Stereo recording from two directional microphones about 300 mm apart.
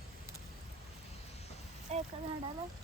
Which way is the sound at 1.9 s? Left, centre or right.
Right.